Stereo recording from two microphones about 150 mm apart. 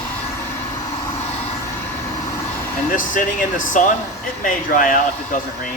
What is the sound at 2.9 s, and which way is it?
Speech, 60° left (ahead or behind).